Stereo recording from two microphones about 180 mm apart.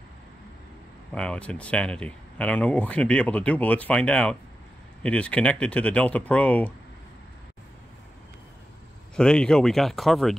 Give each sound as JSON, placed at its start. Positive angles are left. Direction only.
{"t": 1.1, "sound": "speech", "side_deg": 5}
{"t": 9.1, "sound": "speech", "side_deg": 5}